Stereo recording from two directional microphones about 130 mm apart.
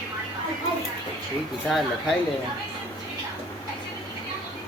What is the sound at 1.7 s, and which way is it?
Speech, centre (ahead or behind).